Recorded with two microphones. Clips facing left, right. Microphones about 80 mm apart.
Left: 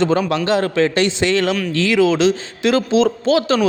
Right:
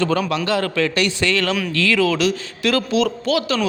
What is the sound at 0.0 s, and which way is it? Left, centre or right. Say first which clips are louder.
A man's voice: left 3 dB; left.